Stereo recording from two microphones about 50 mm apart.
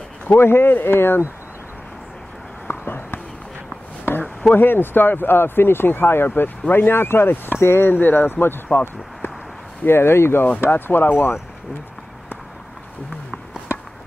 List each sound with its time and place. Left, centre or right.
0.4 s speech: left
2.7 s a sound: left
4.5 s speech: left
9.8 s speech: left
10.6 s speech: left